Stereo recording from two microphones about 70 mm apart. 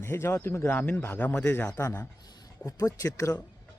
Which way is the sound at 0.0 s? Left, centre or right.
Left.